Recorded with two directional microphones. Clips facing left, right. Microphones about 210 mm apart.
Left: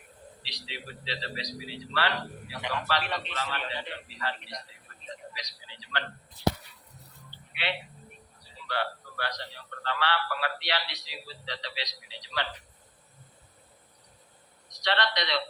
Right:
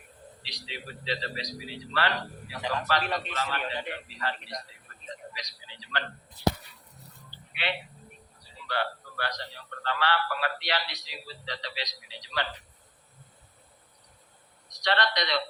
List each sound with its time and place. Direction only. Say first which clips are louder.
1.0 s a man's voice: right 4 dB; 45° right (ahead or behind)
7.5 s speech: right 1 dB; 45° right (ahead or behind)
8.7 s a sound: right 1 dB; 45° right (ahead or behind)
9.8 s a man's voice: right 2 dB; 45° right (ahead or behind)
14.8 s a man's voice: right 1 dB; 45° right (ahead or behind)